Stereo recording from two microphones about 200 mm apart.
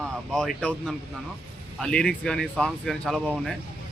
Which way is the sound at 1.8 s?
5° left (ahead or behind).